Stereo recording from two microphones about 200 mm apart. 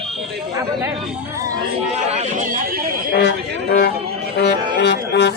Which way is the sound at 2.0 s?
35° right (ahead or behind).